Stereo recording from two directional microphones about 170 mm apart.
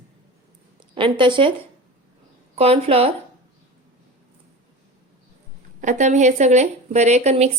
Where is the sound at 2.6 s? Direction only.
35° right (ahead or behind).